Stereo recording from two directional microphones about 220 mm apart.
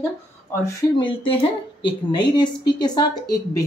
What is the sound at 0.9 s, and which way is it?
A woman's voice, 25° left (ahead or behind).